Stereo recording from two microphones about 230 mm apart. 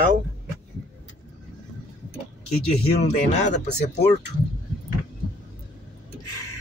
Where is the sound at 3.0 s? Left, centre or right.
Left.